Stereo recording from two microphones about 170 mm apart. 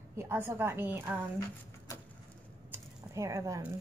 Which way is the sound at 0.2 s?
15° right (ahead or behind).